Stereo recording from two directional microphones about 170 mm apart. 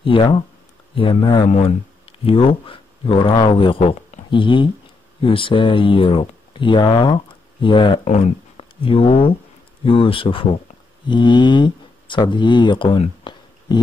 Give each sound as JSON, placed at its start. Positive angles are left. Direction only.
{"t": 0.0, "sound": "speech", "side_deg": 30}